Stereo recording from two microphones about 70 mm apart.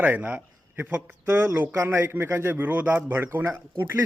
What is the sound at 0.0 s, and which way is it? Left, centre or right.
A man's voice, right.